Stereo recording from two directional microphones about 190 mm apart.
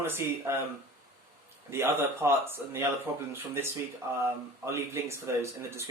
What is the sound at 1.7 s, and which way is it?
Speech, 15° right (ahead or behind).